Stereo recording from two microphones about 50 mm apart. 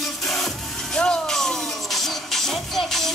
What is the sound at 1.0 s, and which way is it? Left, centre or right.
Music, centre.